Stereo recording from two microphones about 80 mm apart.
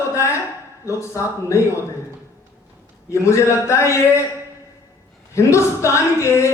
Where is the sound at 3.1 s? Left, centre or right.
Left.